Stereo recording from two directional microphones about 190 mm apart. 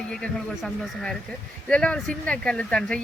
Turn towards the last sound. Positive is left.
turn(degrees=5)  # may be behind; listen again after turning